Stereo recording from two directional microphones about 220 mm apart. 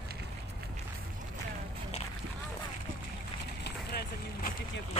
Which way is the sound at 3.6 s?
45° left (ahead or behind).